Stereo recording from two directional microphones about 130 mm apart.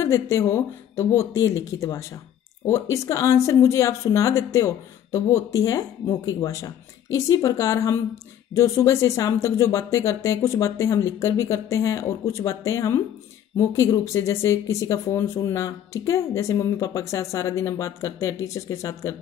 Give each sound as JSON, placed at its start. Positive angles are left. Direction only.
{"t": 0.0, "sound": "speech", "side_deg": 25}